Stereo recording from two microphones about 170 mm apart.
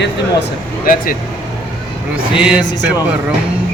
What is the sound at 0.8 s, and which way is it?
Speech, 55° left (ahead or behind).